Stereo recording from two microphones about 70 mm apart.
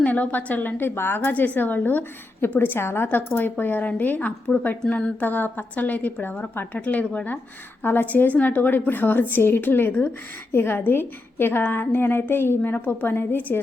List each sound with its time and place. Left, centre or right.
0.0 s a woman's voice: left